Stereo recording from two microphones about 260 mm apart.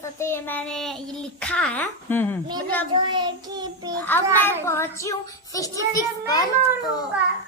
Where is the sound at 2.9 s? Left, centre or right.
Centre.